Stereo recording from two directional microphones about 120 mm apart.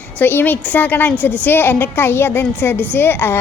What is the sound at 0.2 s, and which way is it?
A woman's voice, 15° left (ahead or behind).